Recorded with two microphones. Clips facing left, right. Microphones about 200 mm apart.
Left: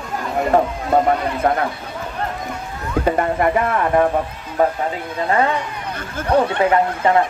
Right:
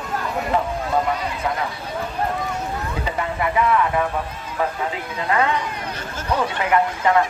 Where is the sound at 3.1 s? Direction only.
50° left (ahead or behind).